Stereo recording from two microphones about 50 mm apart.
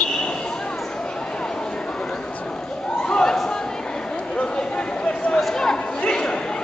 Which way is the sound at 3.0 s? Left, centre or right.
Centre.